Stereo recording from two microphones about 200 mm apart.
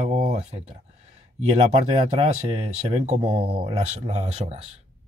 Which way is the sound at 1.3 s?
30° right (ahead or behind).